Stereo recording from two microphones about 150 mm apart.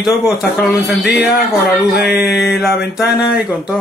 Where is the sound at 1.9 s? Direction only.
90° left.